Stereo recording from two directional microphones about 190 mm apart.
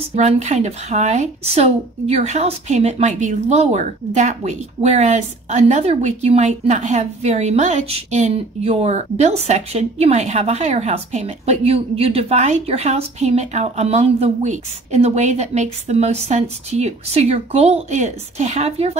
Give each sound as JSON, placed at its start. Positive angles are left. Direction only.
{"t": 0.1, "sound": "speech", "side_deg": -35}